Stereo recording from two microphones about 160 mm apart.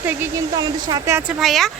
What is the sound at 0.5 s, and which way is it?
Speech, 20° right (ahead or behind).